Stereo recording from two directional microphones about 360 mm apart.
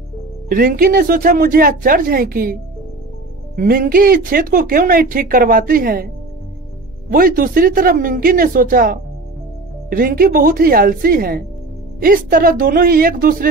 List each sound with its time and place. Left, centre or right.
0.5 s speech: right
7.1 s speech: right